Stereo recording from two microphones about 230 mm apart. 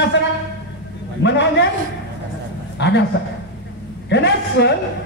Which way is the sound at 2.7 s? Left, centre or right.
Left.